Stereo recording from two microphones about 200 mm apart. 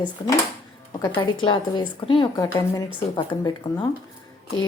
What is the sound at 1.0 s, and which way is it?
A woman's voice, 25° left (ahead or behind).